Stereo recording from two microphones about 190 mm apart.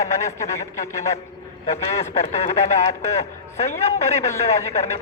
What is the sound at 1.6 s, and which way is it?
Speech, 35° left (ahead or behind).